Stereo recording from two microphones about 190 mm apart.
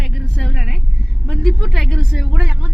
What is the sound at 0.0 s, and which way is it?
Vehicle, centre (ahead or behind).